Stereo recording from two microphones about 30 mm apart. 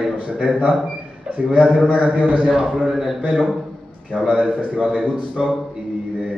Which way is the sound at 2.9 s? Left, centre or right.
Centre.